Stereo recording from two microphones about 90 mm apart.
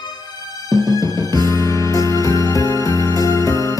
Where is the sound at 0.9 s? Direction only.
40° left (ahead or behind).